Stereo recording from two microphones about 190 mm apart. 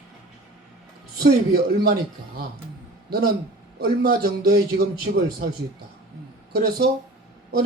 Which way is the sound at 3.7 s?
55° right (ahead or behind).